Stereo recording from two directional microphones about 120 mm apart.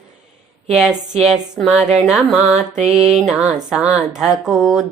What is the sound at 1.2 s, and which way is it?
Speech, 5° right (ahead or behind).